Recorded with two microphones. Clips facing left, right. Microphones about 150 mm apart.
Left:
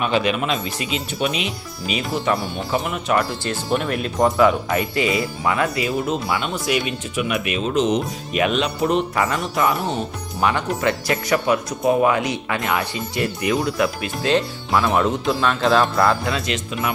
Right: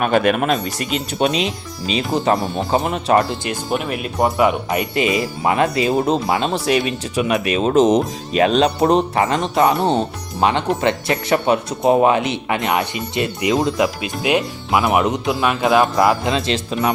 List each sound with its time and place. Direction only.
0.0 s speech: 50° right (ahead or behind)
1.2 s speech: 35° right (ahead or behind)
3.7 s speech: 5° right (ahead or behind); by 8.0 s 45° right (ahead or behind)
8.3 s speech: 35° right (ahead or behind)
9.3 s speech: 25° right (ahead or behind)